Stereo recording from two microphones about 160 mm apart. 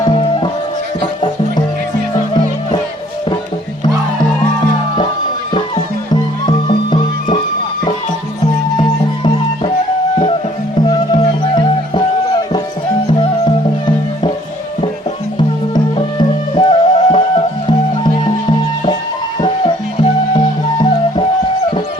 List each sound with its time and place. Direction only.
0.0 s music: 30° left (ahead or behind)
6.4 s music: 30° left (ahead or behind)
8.7 s music: 30° left (ahead or behind)
10.8 s music: 25° left (ahead or behind)
13.1 s music: 30° left (ahead or behind)
15.4 s music: 30° left (ahead or behind)